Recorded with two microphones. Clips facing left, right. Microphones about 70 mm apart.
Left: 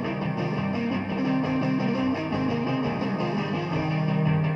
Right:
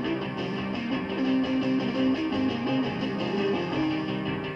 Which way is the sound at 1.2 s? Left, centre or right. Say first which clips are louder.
Even; left.